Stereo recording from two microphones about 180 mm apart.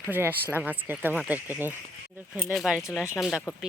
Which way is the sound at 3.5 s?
20° left (ahead or behind).